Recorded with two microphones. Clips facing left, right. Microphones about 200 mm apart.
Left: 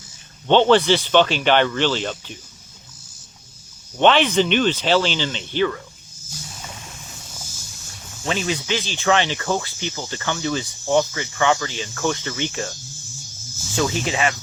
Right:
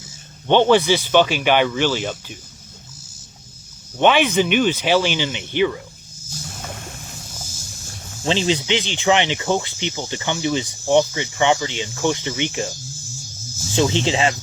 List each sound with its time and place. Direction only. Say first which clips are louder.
0.4 s speech: even; 15° right (ahead or behind)
3.9 s speech: even; 10° right (ahead or behind)
6.6 s boat: right 5 dB; 55° right (ahead or behind)
8.2 s speech: right 4 dB; 25° right (ahead or behind)
13.7 s speech: right 3 dB; 25° right (ahead or behind)